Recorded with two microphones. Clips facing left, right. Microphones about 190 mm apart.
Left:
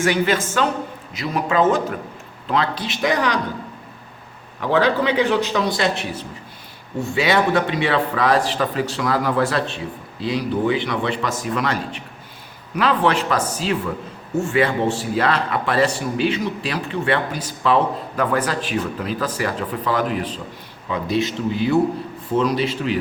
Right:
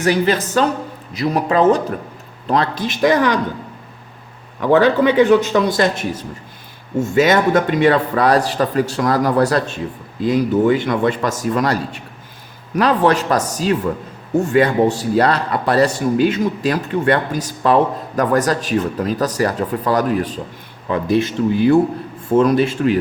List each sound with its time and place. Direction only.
0.0 s speech: 35° right (ahead or behind)
4.7 s speech: 50° right (ahead or behind)